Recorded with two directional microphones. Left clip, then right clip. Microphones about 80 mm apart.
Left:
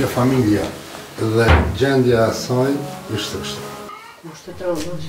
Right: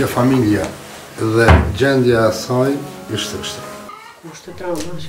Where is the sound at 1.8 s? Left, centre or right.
Centre.